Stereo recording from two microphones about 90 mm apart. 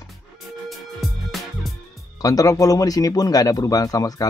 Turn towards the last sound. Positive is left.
turn(degrees=40)  # may be behind; listen again after turning